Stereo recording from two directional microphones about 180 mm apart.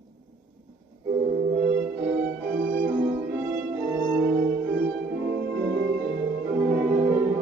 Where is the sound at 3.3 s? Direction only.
15° right (ahead or behind).